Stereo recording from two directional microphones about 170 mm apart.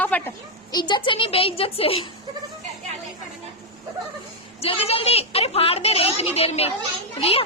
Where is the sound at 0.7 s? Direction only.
25° left (ahead or behind).